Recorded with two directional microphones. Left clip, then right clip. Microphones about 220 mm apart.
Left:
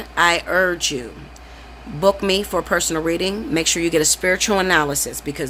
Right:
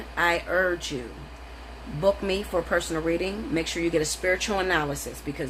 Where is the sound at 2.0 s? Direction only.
45° left (ahead or behind).